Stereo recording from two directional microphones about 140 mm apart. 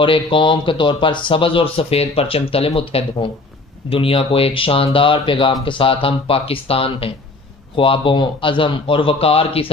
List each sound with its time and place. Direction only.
0.0 s speech: 40° left (ahead or behind)